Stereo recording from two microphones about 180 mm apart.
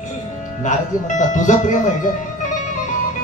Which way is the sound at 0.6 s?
45° left (ahead or behind).